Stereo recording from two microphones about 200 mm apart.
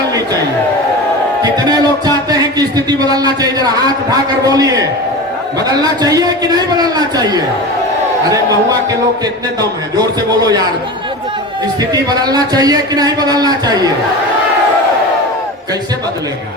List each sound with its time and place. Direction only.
1.4 s a man's voice: 20° right (ahead or behind)
11.8 s a man's voice: 20° right (ahead or behind)